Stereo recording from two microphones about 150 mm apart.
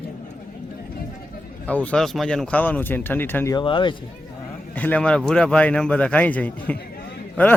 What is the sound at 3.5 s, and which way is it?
Speech, 35° left (ahead or behind).